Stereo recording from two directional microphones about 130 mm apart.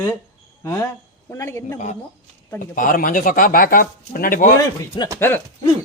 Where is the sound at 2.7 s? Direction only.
90° left.